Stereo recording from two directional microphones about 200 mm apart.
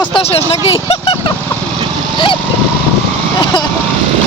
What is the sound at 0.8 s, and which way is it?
Vehicle, 25° left (ahead or behind).